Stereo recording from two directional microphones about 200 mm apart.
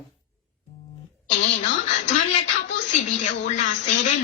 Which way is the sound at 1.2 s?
35° left (ahead or behind).